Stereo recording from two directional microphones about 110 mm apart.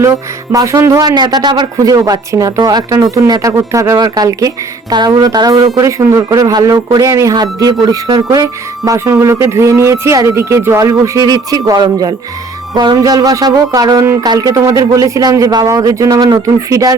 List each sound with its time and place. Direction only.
0.0 s speech: 30° right (ahead or behind)
1.1 s speech: 40° right (ahead or behind)